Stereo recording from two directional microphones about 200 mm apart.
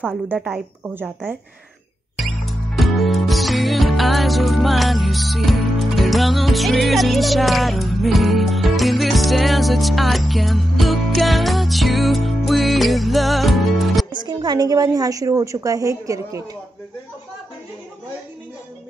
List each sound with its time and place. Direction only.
0.0 s a woman's voice: 10° right (ahead or behind)
2.1 s music: centre (ahead or behind)
14.1 s a woman's voice: 20° right (ahead or behind)